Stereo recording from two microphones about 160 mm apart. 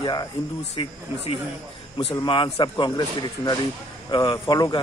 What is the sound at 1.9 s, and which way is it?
Speech, 30° left (ahead or behind).